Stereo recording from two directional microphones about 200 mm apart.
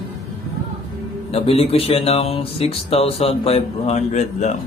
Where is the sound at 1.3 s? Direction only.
30° left (ahead or behind).